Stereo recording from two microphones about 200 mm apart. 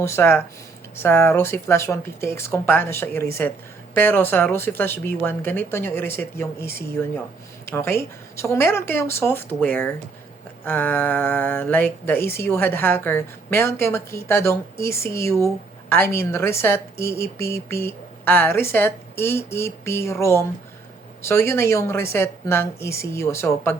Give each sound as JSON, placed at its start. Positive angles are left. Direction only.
{"t": 0.0, "sound": "speech", "side_deg": 10}